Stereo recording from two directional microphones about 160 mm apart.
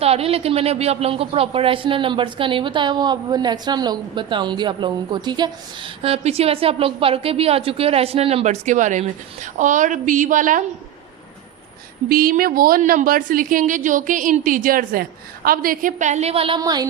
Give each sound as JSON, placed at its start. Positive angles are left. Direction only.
{"t": 0.0, "sound": "a woman's voice", "side_deg": -40}
{"t": 12.0, "sound": "a woman's voice", "side_deg": -65}
{"t": 16.6, "sound": "a sound", "side_deg": -25}